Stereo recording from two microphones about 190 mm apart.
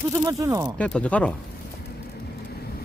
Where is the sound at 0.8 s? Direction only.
5° left (ahead or behind).